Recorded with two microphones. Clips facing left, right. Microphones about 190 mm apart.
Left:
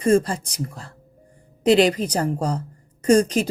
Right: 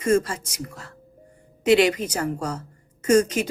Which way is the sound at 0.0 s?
35° left (ahead or behind).